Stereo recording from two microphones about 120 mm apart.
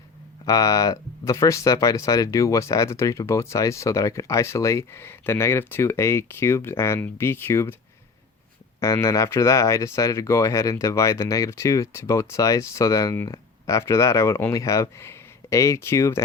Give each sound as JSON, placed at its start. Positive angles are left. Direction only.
{"t": 0.4, "sound": "speech", "side_deg": 30}
{"t": 8.8, "sound": "speech", "side_deg": 25}